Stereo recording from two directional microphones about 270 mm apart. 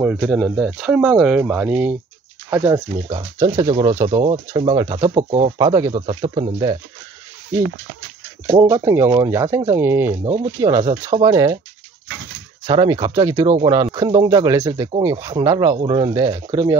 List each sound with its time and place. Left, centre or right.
0.0 s speech: centre
3.1 s speech: right
5.3 s speech: right
5.7 s speech: centre
8.5 s speech: centre
12.6 s speech: centre